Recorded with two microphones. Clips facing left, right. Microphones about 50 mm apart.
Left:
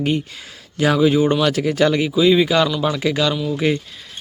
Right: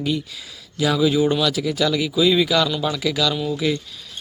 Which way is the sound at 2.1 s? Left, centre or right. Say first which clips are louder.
Left 3 dB; left.